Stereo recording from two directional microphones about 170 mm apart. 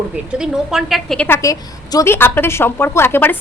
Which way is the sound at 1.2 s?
15° left (ahead or behind).